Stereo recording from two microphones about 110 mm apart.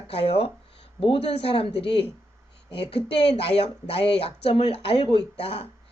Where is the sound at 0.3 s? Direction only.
65° left (ahead or behind).